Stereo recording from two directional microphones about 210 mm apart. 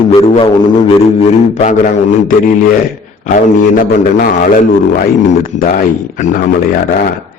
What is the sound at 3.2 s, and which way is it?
A man's voice, 40° left (ahead or behind).